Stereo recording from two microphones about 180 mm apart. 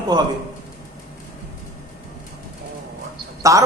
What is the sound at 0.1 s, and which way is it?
Speech, 25° right (ahead or behind).